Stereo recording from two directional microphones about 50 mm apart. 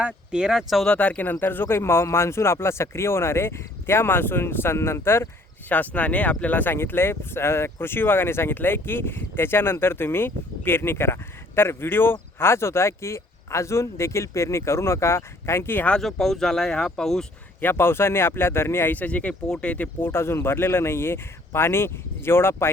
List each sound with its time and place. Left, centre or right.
0.3 s speech: centre
0.9 s speech: left
1.3 s speech: left
5.6 s speech: left
6.7 s speech: left
16.0 s speech: centre
17.6 s speech: left
18.9 s speech: left
20.0 s speech: left